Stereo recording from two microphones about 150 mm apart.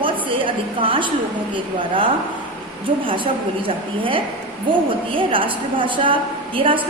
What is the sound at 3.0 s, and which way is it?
A woman's voice, 35° right (ahead or behind).